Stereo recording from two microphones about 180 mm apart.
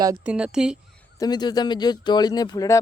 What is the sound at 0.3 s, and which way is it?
Speech, 5° right (ahead or behind).